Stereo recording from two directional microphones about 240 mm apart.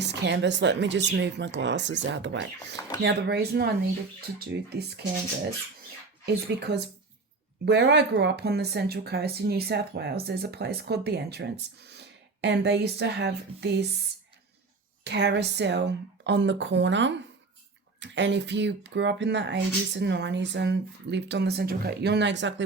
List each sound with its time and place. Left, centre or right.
0.0 s speech: right
6.2 s speech: right
15.0 s speech: right